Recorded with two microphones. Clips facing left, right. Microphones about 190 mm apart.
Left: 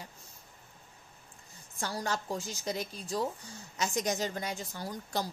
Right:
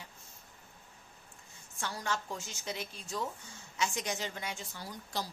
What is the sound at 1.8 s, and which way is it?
A woman's voice, 35° left (ahead or behind).